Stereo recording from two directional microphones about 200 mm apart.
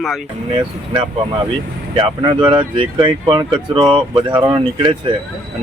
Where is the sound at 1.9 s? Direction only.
25° right (ahead or behind).